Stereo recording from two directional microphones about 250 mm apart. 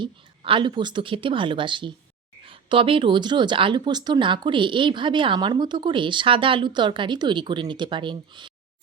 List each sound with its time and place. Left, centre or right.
0.0 s speech: centre